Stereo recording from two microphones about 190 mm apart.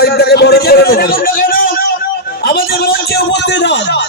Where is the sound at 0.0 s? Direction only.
55° left (ahead or behind).